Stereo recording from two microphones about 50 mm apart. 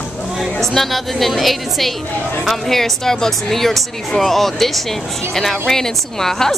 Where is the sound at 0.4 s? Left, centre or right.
Centre.